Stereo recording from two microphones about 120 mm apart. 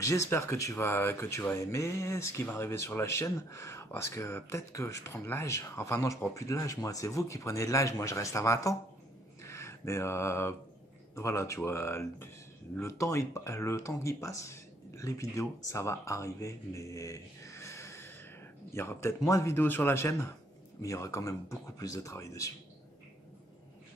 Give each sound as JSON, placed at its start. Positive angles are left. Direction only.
{"t": 0.0, "sound": "speech", "side_deg": 25}
{"t": 9.4, "sound": "a sound", "side_deg": 25}
{"t": 11.1, "sound": "speech", "side_deg": 25}